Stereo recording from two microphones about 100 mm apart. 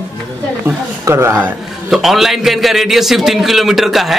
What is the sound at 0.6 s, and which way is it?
Speech, 25° right (ahead or behind).